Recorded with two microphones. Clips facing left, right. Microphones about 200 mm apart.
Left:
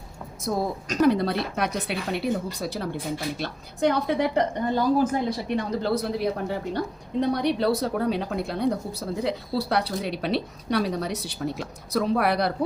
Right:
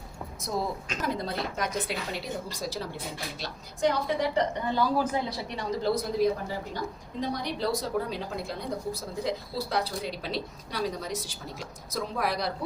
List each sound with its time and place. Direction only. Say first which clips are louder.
0.5 s a woman's voice: left 5 dB; 55° left (ahead or behind)
1.0 s a woman's voice: left 10 dB; 70° left (ahead or behind); by 5.0 s 50° left (ahead or behind)
5.5 s a woman's voice: left 2 dB; 60° left (ahead or behind)